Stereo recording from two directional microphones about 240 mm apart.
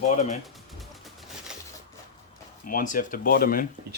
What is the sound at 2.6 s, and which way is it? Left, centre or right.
Speech, left.